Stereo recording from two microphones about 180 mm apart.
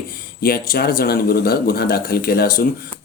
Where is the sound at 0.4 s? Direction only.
55° left (ahead or behind).